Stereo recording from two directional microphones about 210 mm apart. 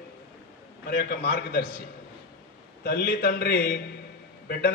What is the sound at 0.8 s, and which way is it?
Speech, 50° left (ahead or behind).